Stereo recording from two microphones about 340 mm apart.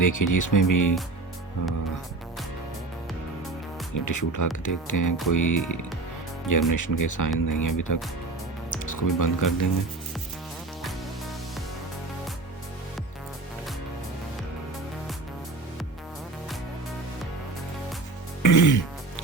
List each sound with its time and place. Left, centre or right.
0.0 s speech: left
3.9 s speech: left
18.4 s music: left